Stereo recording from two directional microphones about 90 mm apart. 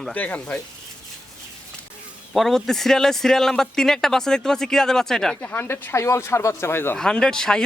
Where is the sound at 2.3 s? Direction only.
5° left (ahead or behind).